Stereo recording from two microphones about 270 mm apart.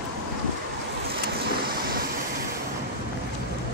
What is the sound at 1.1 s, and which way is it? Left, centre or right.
Vehicle, right.